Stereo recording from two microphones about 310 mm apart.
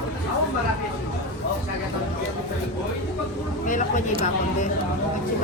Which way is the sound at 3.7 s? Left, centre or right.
Left.